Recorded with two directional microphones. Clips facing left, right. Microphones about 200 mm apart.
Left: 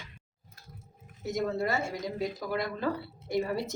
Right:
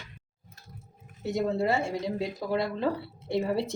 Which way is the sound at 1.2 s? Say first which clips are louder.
Right 3 dB; 30° right (ahead or behind).